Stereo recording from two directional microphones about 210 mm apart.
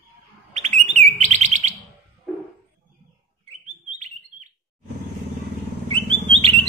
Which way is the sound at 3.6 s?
35° right (ahead or behind).